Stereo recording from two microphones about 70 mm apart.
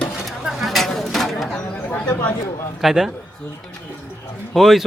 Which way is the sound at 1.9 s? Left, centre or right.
Left.